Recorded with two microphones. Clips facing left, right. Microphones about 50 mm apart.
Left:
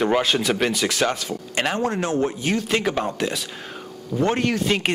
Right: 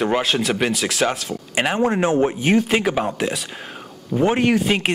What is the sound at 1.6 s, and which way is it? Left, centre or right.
Speech, centre.